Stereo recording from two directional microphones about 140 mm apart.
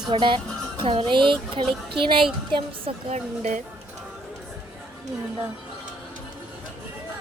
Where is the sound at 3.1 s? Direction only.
55° right (ahead or behind).